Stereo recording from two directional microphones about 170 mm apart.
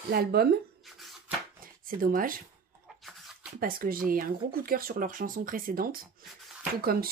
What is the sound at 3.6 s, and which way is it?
Speech, 55° right (ahead or behind).